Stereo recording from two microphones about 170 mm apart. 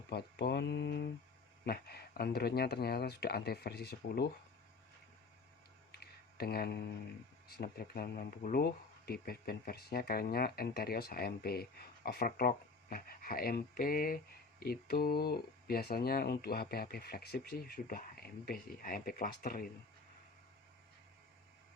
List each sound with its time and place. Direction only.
0.1 s speech: 75° left (ahead or behind)
1.6 s speech: 65° left (ahead or behind)
5.9 s a sound: 65° left (ahead or behind)
7.5 s speech: 65° left (ahead or behind)